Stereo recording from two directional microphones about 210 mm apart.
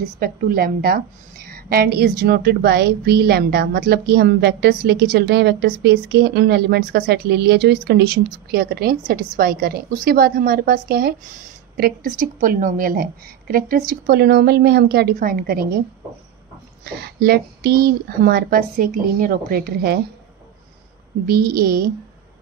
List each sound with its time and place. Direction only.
0.2 s a woman's voice: 45° right (ahead or behind)
16.8 s a woman's voice: 50° right (ahead or behind)
21.3 s a woman's voice: 50° right (ahead or behind)